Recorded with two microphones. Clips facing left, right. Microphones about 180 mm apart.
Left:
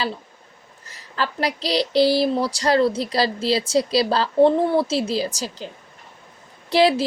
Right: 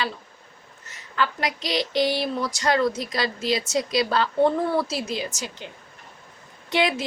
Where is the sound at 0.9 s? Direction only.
35° left (ahead or behind).